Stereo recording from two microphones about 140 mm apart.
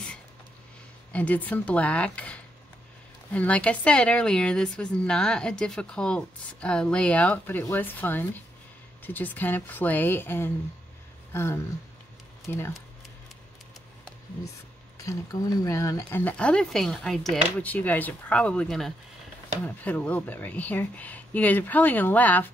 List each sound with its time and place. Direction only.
1.1 s a woman's voice: 10° left (ahead or behind)
15.6 s a woman's voice: 20° left (ahead or behind)